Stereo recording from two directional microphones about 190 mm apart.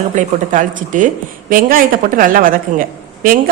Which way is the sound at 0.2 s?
45° right (ahead or behind).